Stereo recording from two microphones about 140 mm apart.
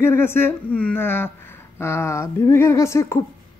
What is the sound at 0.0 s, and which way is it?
A woman's voice, 15° left (ahead or behind).